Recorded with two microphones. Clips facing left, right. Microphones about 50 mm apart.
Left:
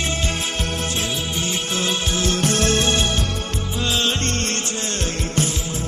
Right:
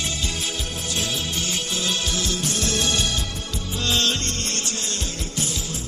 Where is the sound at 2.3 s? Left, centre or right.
Left.